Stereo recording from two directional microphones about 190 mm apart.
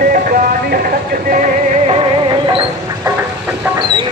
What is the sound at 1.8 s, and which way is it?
Music, 30° right (ahead or behind).